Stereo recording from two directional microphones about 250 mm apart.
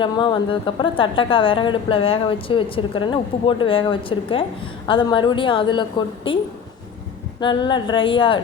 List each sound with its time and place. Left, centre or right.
0.0 s a woman's voice: centre